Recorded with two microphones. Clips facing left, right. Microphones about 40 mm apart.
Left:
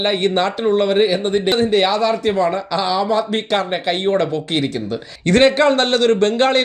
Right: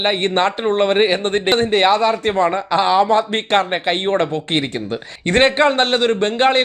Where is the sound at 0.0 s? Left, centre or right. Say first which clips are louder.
Even; right.